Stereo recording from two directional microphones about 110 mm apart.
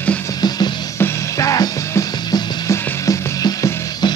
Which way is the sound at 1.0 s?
30° left (ahead or behind).